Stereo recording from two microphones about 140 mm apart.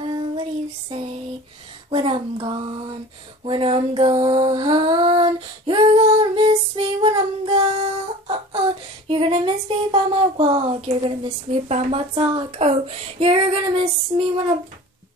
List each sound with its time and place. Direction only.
0.0 s child singing: 40° right (ahead or behind)
1.9 s speech: 35° right (ahead or behind)
3.4 s female singing: 40° right (ahead or behind)